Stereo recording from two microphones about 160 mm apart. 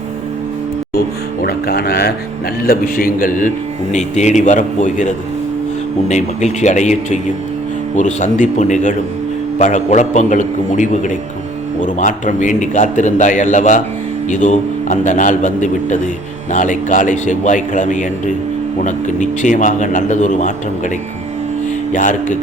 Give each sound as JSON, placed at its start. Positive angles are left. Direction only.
{"t": 1.4, "sound": "speech", "side_deg": 80}
{"t": 2.6, "sound": "a man's voice", "side_deg": 65}
{"t": 3.9, "sound": "a man's voice", "side_deg": 45}
{"t": 21.9, "sound": "a man's voice", "side_deg": 55}